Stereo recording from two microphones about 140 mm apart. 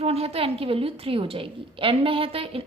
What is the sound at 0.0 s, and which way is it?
A woman's voice, 45° right (ahead or behind).